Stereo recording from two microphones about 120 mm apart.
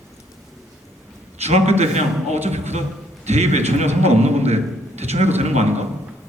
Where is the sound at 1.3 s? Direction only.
65° right (ahead or behind).